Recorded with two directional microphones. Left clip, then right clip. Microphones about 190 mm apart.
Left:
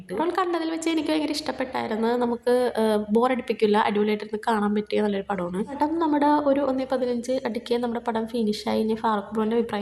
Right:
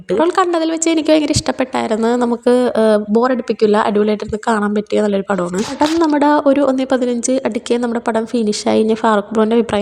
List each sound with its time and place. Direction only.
0.1 s a woman's voice: 40° right (ahead or behind)